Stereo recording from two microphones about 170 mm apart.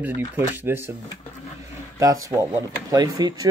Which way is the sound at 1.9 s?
20° right (ahead or behind).